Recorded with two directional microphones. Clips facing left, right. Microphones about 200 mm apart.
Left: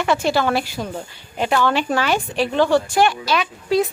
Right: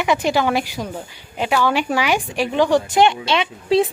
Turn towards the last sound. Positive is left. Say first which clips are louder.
# right 2 dB
turn(degrees=-25)  # may be behind; listen again after turning